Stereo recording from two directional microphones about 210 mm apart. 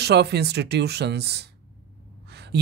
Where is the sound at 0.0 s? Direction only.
50° right (ahead or behind).